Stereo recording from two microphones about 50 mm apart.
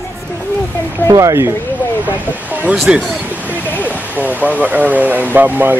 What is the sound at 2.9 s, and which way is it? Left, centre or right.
Speech, right.